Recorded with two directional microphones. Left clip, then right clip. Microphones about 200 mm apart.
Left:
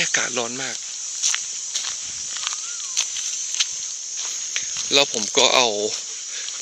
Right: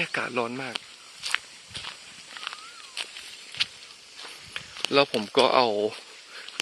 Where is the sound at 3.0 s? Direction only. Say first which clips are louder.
Left 10 dB; 55° left (ahead or behind).